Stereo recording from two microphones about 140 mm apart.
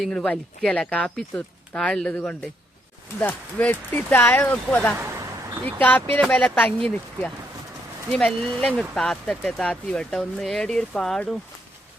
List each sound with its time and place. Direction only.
0.0 s speech: 5° left (ahead or behind)
4.9 s a sound: 20° right (ahead or behind)
6.1 s speech: 5° left (ahead or behind)